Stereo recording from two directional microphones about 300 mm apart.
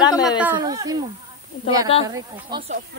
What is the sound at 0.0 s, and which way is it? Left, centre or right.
Speech, centre.